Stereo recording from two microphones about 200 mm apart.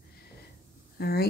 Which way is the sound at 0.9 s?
50° left (ahead or behind).